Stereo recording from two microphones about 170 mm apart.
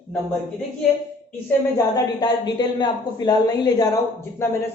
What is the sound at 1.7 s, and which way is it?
A man's voice, 20° left (ahead or behind).